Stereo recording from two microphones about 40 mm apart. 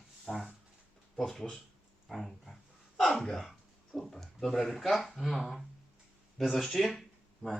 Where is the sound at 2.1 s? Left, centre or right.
Centre.